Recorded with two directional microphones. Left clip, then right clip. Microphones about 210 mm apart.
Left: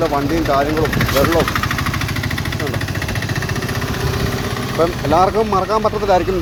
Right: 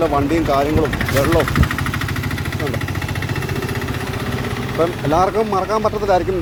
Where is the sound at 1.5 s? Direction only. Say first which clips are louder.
Left 2 dB; 25° left (ahead or behind).